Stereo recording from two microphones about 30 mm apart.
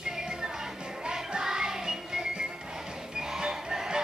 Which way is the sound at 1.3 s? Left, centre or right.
Right.